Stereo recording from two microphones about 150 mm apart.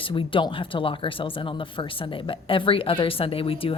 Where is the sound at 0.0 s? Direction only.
35° left (ahead or behind).